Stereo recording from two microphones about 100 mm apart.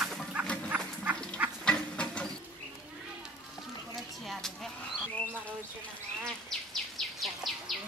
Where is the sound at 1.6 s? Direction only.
10° left (ahead or behind).